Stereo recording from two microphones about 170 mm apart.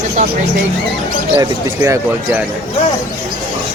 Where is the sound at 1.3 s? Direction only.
25° right (ahead or behind).